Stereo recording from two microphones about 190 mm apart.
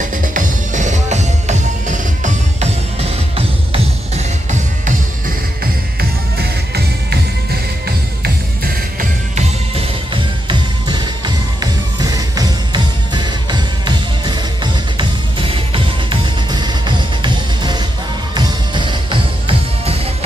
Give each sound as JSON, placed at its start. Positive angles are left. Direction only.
{"t": 0.0, "sound": "music", "side_deg": -45}
{"t": 5.9, "sound": "music", "side_deg": -60}
{"t": 10.9, "sound": "music", "side_deg": -25}